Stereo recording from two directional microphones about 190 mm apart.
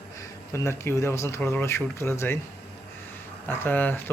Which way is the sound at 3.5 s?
10° left (ahead or behind).